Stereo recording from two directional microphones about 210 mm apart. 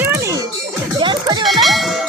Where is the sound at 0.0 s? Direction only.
10° right (ahead or behind).